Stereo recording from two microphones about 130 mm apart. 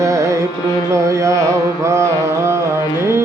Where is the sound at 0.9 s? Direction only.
25° right (ahead or behind).